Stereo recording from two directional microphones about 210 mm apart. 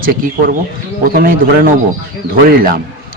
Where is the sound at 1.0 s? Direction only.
45° right (ahead or behind).